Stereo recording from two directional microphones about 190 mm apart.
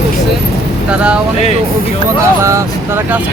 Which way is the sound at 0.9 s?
5° right (ahead or behind).